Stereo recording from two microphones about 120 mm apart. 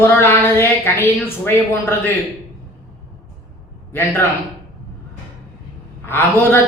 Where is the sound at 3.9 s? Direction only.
20° left (ahead or behind).